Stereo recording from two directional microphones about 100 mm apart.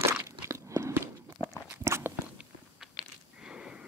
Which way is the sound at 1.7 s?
25° right (ahead or behind).